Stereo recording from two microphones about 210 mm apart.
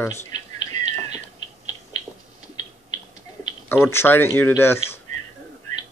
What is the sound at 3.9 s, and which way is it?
Speech, 10° left (ahead or behind).